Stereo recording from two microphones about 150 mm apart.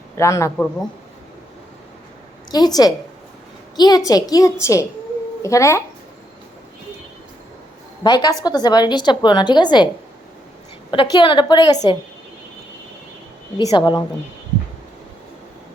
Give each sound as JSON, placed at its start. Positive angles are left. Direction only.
{"t": 0.2, "sound": "a woman's voice", "side_deg": 20}
{"t": 2.5, "sound": "a woman's voice", "side_deg": 25}
{"t": 8.0, "sound": "a woman's voice", "side_deg": 30}
{"t": 10.9, "sound": "a woman's voice", "side_deg": 35}
{"t": 13.6, "sound": "a woman's voice", "side_deg": 25}